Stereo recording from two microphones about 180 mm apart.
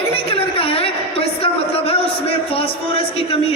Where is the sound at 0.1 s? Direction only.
30° left (ahead or behind).